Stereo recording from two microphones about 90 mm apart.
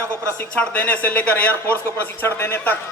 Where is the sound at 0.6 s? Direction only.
15° left (ahead or behind).